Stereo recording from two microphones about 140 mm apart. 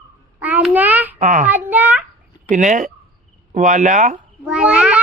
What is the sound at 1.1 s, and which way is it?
Speech, 60° right (ahead or behind).